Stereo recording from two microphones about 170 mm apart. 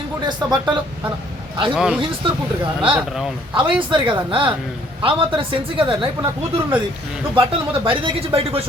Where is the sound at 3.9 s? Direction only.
30° right (ahead or behind).